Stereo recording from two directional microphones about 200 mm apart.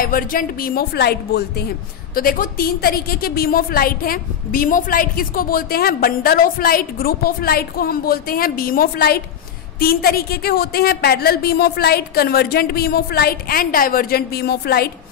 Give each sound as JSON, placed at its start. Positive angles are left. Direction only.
{"t": 0.0, "sound": "a woman's voice", "side_deg": 45}